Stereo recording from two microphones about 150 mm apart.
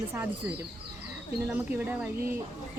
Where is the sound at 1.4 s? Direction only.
10° right (ahead or behind).